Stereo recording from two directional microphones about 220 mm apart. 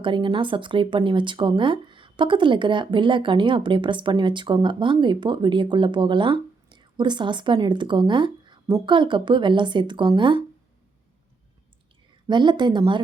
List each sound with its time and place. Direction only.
0.0 s speech: 20° right (ahead or behind)
12.3 s speech: 20° right (ahead or behind)